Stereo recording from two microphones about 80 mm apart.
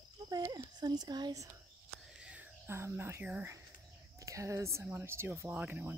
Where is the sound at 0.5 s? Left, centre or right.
Right.